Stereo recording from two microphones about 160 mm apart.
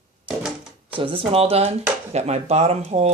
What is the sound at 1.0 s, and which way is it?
Speech, 35° right (ahead or behind).